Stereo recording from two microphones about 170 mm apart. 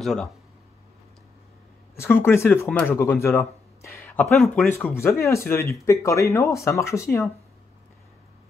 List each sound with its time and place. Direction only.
0.0 s speech: centre (ahead or behind)
2.0 s speech: 15° left (ahead or behind)